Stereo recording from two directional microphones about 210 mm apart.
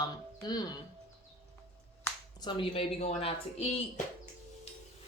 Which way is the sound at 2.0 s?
20° left (ahead or behind).